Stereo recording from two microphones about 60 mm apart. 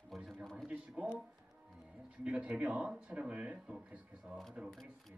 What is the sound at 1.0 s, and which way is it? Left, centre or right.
Speech, right.